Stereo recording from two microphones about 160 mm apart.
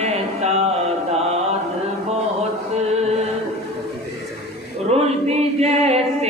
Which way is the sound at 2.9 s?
40° right (ahead or behind).